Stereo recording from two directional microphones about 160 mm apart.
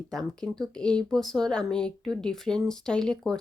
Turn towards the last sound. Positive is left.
turn(degrees=5)  # may be behind; listen again after turning